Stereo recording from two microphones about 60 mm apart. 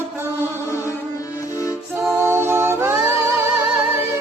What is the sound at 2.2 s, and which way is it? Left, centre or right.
Music, right.